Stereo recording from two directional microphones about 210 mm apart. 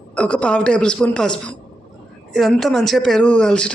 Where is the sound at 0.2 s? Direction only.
5° left (ahead or behind).